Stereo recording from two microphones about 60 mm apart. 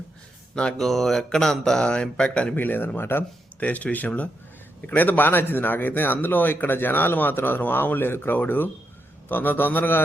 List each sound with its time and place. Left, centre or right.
0.5 s speech: centre
2.6 s speech: left
3.6 s speech: left